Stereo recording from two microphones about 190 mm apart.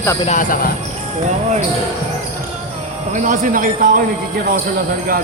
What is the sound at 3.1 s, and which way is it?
Speech, 45° right (ahead or behind).